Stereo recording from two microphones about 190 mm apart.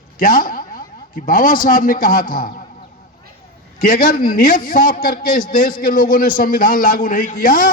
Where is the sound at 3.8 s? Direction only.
50° left (ahead or behind).